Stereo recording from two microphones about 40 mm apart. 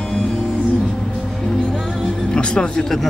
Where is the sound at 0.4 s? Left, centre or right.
Centre.